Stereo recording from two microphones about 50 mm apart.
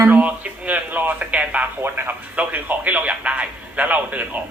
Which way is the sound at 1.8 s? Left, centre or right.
Right.